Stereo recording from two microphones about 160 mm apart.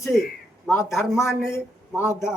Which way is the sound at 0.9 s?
Centre (ahead or behind).